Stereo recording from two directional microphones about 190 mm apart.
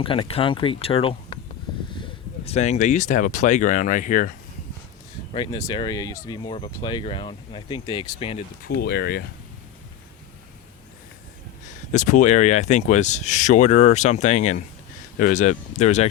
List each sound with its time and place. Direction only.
0.0 s speech: 25° left (ahead or behind)
2.4 s speech: 35° left (ahead or behind)
5.3 s speech: 25° left (ahead or behind)
8.6 s speech: 55° left (ahead or behind)
11.9 s speech: 40° left (ahead or behind)